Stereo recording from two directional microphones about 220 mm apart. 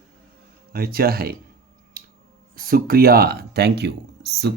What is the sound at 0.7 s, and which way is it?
Speech, 40° right (ahead or behind).